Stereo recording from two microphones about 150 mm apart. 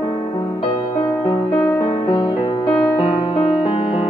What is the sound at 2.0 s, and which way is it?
Music, 30° left (ahead or behind).